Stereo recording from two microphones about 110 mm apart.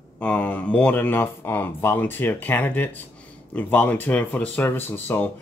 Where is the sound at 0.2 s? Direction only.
15° left (ahead or behind).